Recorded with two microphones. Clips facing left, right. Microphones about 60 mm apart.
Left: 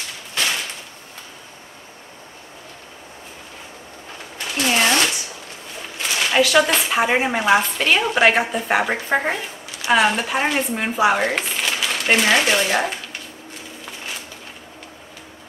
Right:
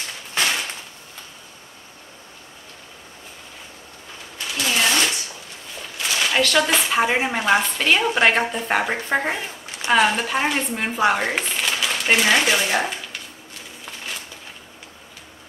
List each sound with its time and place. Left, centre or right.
4.6 s sewing machine: left
5.9 s speech: centre